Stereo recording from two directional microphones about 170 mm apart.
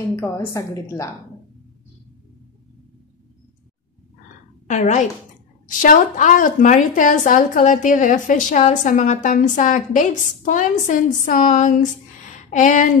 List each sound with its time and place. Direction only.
0.1 s a woman's voice: 15° left (ahead or behind)
4.6 s a woman's voice: 45° left (ahead or behind)